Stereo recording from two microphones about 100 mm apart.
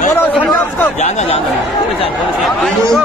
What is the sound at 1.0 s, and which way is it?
Speech, 90° left.